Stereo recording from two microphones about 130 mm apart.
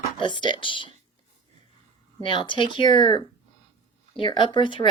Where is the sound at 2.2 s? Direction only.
40° left (ahead or behind).